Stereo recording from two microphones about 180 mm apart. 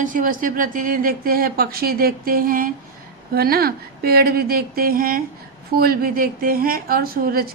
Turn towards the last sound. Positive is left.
turn(degrees=-55)  # may be behind; listen again after turning